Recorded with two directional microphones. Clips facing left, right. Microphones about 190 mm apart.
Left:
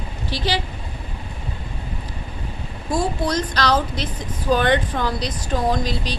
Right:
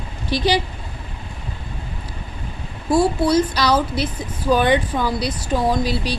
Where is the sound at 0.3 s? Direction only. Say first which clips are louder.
Right 5 dB; 15° right (ahead or behind).